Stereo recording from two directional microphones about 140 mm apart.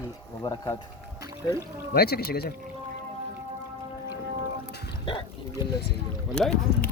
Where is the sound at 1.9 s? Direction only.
90° left.